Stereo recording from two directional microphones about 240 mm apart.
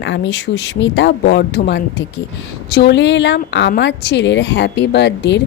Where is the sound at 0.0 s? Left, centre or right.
Left.